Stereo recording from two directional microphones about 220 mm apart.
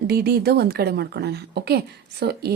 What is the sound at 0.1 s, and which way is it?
Speech, 45° right (ahead or behind).